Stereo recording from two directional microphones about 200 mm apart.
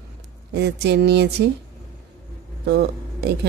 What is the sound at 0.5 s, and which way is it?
Speech, 55° right (ahead or behind).